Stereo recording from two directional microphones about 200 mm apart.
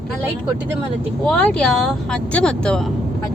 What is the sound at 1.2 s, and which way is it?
Speech, 5° left (ahead or behind).